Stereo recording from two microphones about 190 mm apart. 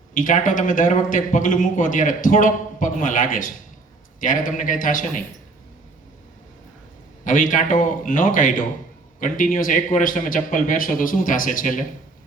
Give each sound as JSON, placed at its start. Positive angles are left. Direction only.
{"t": 0.1, "sound": "a man's voice", "side_deg": 45}
{"t": 7.3, "sound": "a man's voice", "side_deg": 45}